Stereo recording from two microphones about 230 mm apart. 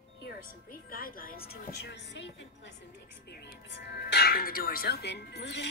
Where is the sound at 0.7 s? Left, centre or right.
Left.